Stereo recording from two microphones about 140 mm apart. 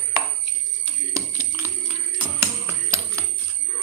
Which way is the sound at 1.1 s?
15° right (ahead or behind).